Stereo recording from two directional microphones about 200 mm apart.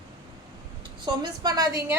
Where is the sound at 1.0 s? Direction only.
20° right (ahead or behind).